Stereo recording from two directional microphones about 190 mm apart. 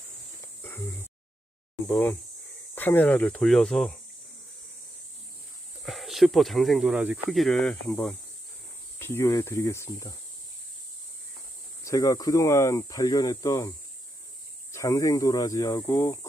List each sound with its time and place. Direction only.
0.4 s a sound: 15° left (ahead or behind)
1.9 s speech: 10° left (ahead or behind)
5.8 s speech: centre (ahead or behind)
11.8 s speech: 20° left (ahead or behind)